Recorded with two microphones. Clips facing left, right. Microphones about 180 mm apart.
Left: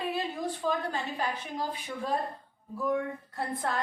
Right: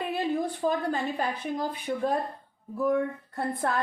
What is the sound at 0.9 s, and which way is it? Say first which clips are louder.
A woman's voice: right 4 dB; 55° right (ahead or behind).